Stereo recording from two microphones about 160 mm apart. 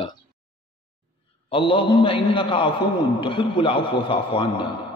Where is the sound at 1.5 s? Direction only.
35° left (ahead or behind).